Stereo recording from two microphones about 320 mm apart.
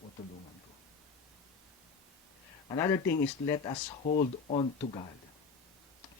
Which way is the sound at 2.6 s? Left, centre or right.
Centre.